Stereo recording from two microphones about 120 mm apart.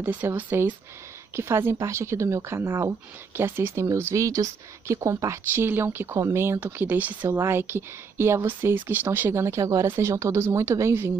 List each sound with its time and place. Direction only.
0.0 s speech: 15° right (ahead or behind)